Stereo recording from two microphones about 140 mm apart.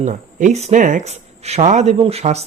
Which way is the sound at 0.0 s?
60° right (ahead or behind).